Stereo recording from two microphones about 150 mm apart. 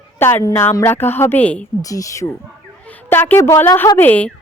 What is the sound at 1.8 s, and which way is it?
Speech, 25° left (ahead or behind).